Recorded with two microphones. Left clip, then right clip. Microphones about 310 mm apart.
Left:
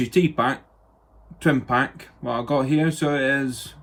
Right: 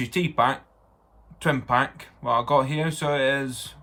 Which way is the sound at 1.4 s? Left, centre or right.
Right.